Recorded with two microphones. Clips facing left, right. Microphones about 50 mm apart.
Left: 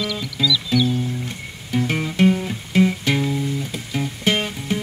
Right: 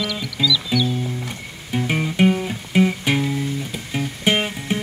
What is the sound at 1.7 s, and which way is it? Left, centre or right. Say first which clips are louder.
Music: even; centre.